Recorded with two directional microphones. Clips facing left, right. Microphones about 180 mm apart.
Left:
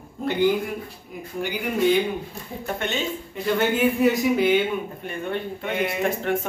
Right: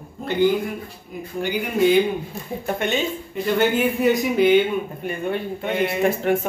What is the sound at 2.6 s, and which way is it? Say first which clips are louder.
Speech: right 4 dB; 15° right (ahead or behind).